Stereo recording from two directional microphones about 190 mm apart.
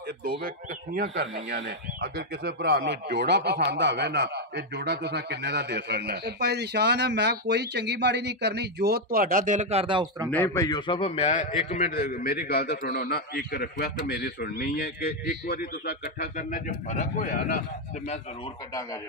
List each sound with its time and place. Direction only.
1.0 s speech: 75° right (ahead or behind)
1.5 s speech: 60° right (ahead or behind); by 10.3 s 20° right (ahead or behind)
10.3 s a man's voice: 15° left (ahead or behind); by 11.6 s 35° left (ahead or behind)
11.7 s a man's voice: 50° left (ahead or behind)